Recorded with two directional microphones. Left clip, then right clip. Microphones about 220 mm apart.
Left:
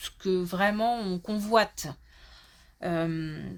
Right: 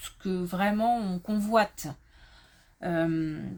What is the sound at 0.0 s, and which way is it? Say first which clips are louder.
Speech: left 5 dB; 35° left (ahead or behind).